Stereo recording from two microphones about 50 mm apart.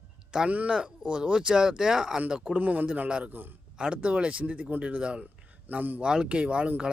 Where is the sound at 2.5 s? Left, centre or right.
Right.